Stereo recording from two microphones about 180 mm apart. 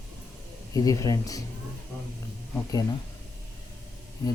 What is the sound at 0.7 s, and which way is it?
Speech, 20° left (ahead or behind).